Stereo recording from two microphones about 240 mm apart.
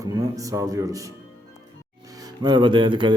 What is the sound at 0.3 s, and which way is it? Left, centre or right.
Speech, centre.